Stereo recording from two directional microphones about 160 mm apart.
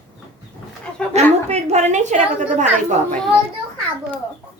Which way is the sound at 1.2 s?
45° right (ahead or behind).